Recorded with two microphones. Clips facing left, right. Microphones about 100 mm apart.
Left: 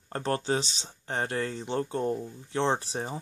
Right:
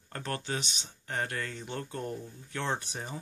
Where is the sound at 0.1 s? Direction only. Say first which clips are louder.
Left 7 dB; 30° left (ahead or behind).